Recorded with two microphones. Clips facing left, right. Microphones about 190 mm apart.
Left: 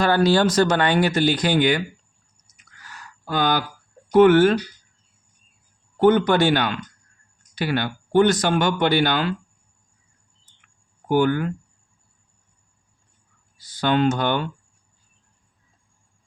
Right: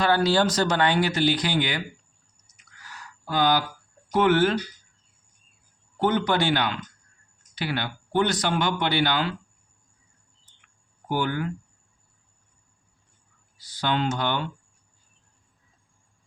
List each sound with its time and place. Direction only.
0.0 s speech: 50° left (ahead or behind)
3.2 s speech: 50° left (ahead or behind)
6.0 s speech: 55° left (ahead or behind)
11.1 s speech: 50° left (ahead or behind)
13.6 s speech: 50° left (ahead or behind)